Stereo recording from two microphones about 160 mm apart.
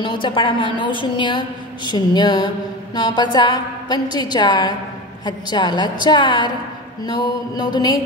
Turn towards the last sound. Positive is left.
turn(degrees=25)  # may be behind; listen again after turning